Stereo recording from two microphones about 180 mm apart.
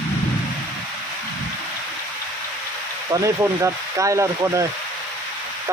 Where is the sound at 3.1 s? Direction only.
15° right (ahead or behind).